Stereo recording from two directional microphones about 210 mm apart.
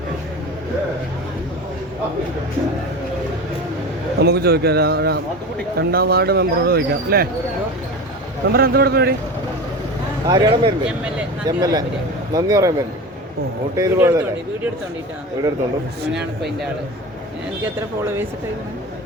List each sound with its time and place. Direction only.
4.2 s speech: 50° right (ahead or behind)
8.5 s speech: 45° right (ahead or behind)
10.2 s speech: 20° right (ahead or behind)
13.7 s speech: 15° right (ahead or behind)